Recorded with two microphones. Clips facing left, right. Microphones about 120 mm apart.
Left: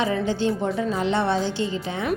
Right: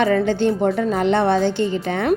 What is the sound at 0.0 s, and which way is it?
A woman's voice, 60° right (ahead or behind).